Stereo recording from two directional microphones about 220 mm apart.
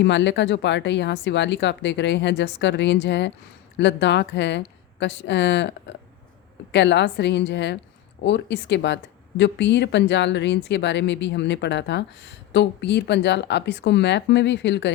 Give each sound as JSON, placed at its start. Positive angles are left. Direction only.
{"t": 0.0, "sound": "speech", "side_deg": 55}